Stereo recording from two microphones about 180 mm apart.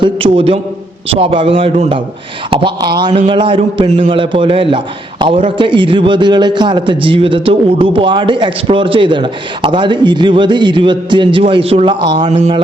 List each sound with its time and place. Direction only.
0.0 s a man's voice: 30° right (ahead or behind)